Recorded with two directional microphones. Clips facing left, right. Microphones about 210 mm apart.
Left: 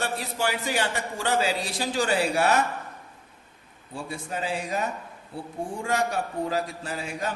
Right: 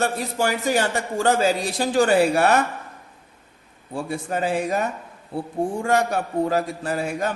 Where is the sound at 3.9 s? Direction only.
50° right (ahead or behind).